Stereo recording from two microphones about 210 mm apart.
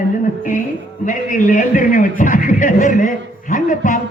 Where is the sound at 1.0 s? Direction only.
40° left (ahead or behind).